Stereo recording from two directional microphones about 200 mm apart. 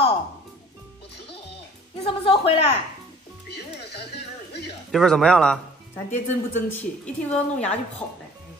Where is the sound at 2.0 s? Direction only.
25° left (ahead or behind).